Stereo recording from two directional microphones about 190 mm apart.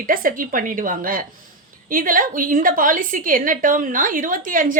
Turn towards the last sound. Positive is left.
turn(degrees=-45)  # may be behind; listen again after turning